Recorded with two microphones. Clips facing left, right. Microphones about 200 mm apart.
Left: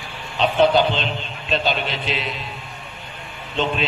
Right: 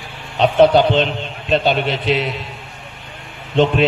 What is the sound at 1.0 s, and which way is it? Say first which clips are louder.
A man's voice: right 8 dB; 55° right (ahead or behind).